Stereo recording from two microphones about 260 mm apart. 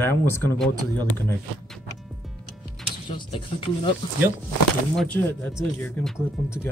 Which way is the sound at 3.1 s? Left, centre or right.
Centre.